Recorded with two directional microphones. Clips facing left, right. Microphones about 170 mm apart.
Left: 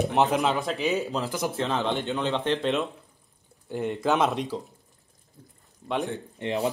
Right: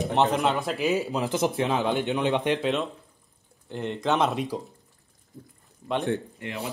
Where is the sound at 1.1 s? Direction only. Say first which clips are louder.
Right 3 dB; 20° right (ahead or behind).